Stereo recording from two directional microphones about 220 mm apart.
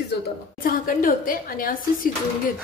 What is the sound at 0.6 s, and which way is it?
A woman's voice, 40° left (ahead or behind).